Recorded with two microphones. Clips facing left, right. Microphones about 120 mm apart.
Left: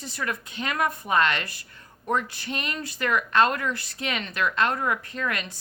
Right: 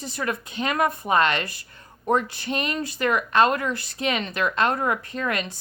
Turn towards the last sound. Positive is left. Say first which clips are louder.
# right 3 dB
turn(degrees=-25)  # may be behind; listen again after turning